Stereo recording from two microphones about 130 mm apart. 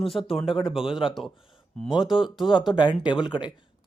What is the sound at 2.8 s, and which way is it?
Speech, 35° left (ahead or behind).